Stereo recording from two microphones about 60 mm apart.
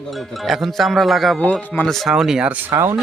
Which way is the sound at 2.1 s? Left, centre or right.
Centre.